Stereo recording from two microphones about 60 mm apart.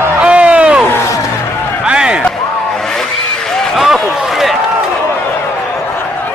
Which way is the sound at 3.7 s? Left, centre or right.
Centre.